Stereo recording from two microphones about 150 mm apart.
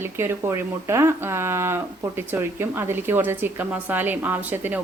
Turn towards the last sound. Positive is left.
turn(degrees=-10)  # may be behind; listen again after turning